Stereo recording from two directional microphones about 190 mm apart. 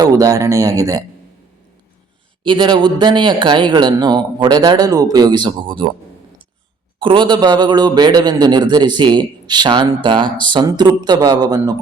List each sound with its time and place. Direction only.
0.0 s speech: 20° right (ahead or behind)
2.4 s speech: 25° right (ahead or behind)
7.0 s speech: 25° right (ahead or behind)